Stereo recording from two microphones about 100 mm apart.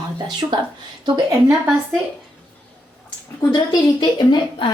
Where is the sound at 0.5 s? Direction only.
45° right (ahead or behind).